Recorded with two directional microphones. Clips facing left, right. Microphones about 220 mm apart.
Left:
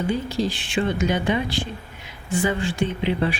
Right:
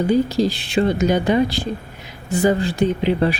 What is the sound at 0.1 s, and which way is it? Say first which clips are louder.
Speech: right 7 dB; 40° right (ahead or behind).